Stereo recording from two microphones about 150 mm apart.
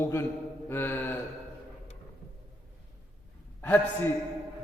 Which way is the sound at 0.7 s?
15° left (ahead or behind).